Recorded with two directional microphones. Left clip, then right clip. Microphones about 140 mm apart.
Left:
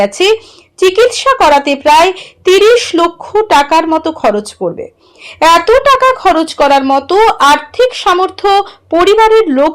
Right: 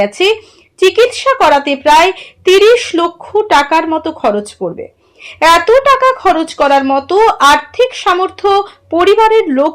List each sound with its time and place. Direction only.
0.0 s speech: 35° left (ahead or behind)